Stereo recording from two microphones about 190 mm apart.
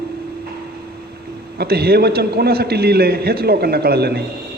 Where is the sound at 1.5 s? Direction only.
55° right (ahead or behind).